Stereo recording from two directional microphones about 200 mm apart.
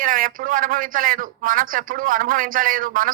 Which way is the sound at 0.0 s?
45° right (ahead or behind).